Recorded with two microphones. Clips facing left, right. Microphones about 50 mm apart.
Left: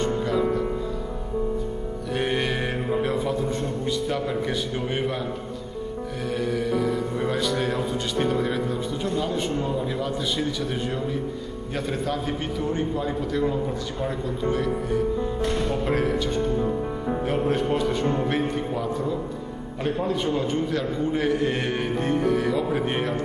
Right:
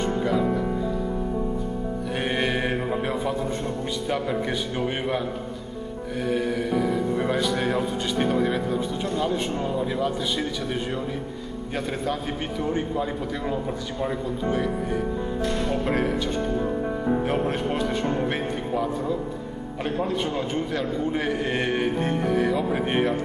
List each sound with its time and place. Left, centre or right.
0.0 s music: centre
2.1 s mantra: centre
4.1 s a man's voice: centre
6.2 s a man's voice: centre
15.8 s a man's voice: centre
17.3 s a man's voice: centre